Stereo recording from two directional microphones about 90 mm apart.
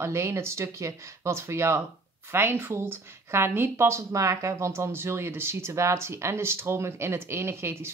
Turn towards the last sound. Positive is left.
turn(degrees=-25)  # may be behind; listen again after turning